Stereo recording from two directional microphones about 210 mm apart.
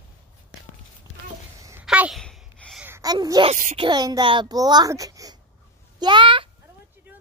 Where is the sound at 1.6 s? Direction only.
15° right (ahead or behind); by 2.8 s 5° left (ahead or behind).